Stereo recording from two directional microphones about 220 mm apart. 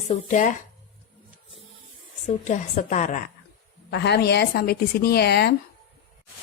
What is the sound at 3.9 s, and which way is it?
A woman's voice, 50° left (ahead or behind).